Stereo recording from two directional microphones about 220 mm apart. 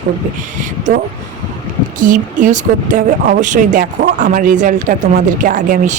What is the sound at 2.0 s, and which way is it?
Speech, 35° right (ahead or behind).